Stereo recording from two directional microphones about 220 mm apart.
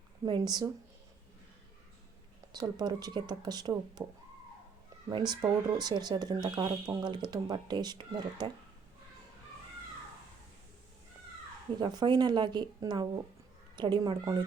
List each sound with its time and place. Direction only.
0.3 s speech: 20° right (ahead or behind)
2.5 s speech: 20° right (ahead or behind)
5.0 s speech: 20° right (ahead or behind)
11.8 s speech: 20° right (ahead or behind)